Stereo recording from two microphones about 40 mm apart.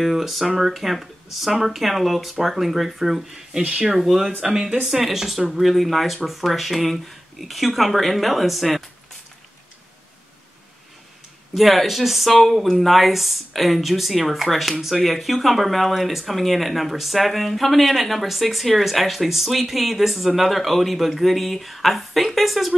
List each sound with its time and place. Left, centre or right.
0.0 s speech: centre
11.5 s speech: centre